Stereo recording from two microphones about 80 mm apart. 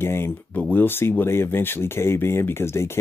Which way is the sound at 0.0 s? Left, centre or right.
Left.